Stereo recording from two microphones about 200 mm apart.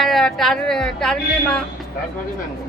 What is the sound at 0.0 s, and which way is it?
Speech, centre (ahead or behind).